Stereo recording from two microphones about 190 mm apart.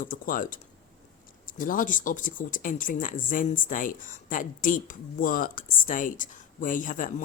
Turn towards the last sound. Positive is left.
turn(degrees=45)  # may be behind; listen again after turning